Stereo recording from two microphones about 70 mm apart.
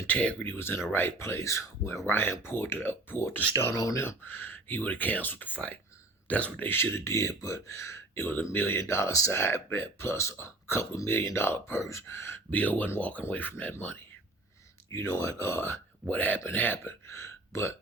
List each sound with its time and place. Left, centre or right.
0.1 s speech: centre
0.4 s speech: left
2.0 s speech: left
8.3 s speech: left
9.3 s speech: left
12.5 s speech: left
14.9 s speech: left
16.0 s speech: left